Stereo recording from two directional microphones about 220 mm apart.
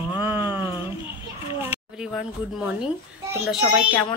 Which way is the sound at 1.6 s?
10° right (ahead or behind).